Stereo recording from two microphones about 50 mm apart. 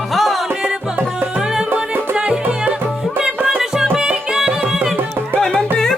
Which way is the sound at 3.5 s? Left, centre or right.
Centre.